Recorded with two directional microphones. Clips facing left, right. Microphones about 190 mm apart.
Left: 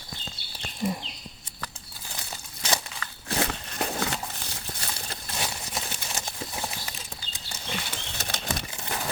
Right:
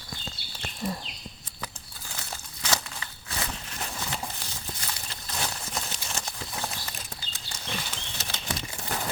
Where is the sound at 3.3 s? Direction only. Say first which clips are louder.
Left 7 dB; 60° left (ahead or behind).